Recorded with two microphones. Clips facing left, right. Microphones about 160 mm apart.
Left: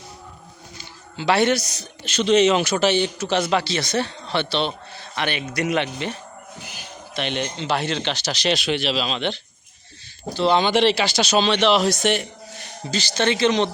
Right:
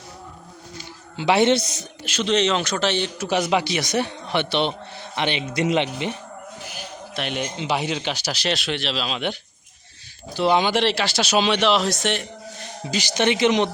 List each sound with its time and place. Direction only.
1.1 s a man's voice: 20° right (ahead or behind)
2.0 s speech: centre (ahead or behind)
3.2 s speech: 10° right (ahead or behind)
7.1 s speech: 5° right (ahead or behind)
11.7 s speech: centre (ahead or behind)
12.9 s speech: 15° right (ahead or behind)